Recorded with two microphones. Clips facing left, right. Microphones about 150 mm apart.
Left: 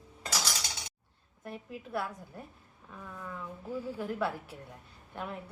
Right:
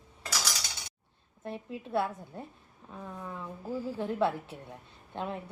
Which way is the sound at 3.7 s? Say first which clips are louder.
Right 2 dB; centre (ahead or behind).